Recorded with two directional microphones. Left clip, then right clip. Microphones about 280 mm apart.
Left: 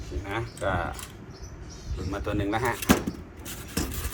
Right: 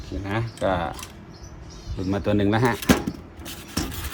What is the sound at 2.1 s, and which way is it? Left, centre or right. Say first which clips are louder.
Speech: right 6 dB; right.